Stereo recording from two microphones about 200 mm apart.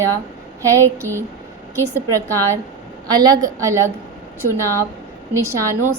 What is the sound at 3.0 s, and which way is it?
A woman's voice, 20° right (ahead or behind).